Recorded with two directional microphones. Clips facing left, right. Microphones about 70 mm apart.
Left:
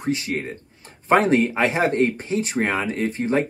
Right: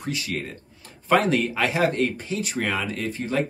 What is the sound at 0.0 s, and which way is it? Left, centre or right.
Speech, left.